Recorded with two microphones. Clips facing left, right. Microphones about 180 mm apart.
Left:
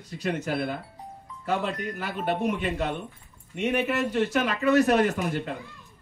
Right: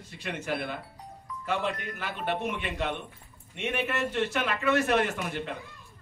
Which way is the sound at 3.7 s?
10° left (ahead or behind).